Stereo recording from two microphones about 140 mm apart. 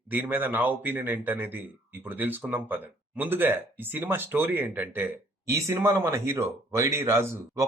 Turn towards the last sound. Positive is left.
turn(degrees=-20)  # may be behind; listen again after turning